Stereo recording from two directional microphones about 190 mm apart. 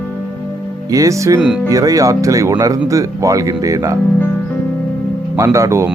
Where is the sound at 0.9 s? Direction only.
15° right (ahead or behind).